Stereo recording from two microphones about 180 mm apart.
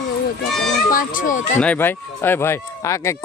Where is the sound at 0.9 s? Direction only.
50° left (ahead or behind).